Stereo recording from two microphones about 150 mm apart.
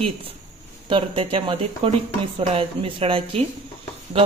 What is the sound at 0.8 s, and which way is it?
A woman's voice, 35° right (ahead or behind).